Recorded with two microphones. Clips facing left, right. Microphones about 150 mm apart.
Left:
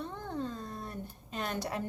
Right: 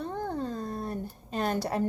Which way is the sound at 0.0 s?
40° right (ahead or behind).